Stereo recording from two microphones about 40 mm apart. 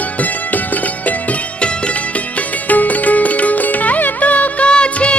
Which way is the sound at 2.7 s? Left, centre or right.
Left.